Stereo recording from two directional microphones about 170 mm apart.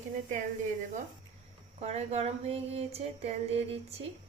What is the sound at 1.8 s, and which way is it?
Speech, 40° right (ahead or behind).